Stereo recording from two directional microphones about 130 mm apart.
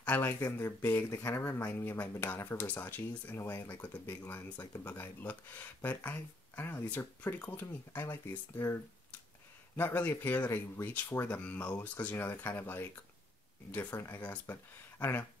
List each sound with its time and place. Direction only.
0.0 s speech: 15° left (ahead or behind)